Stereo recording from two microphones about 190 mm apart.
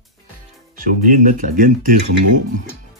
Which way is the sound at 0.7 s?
45° right (ahead or behind).